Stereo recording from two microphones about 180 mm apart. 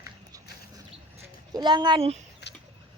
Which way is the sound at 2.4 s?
65° left (ahead or behind).